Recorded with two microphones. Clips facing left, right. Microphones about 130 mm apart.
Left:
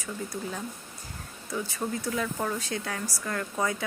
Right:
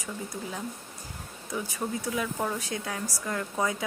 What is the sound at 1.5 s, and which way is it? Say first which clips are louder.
Speech: left 1 dB; 15° right (ahead or behind).